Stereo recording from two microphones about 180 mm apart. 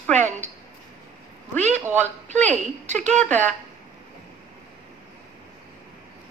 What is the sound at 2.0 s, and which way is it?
A woman's voice, 40° right (ahead or behind).